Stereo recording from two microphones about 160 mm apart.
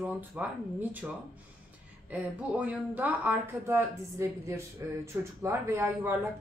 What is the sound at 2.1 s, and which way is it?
A woman's voice, 10° right (ahead or behind).